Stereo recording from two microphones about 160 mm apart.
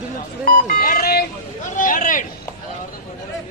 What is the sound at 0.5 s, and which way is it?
Music, 60° left (ahead or behind).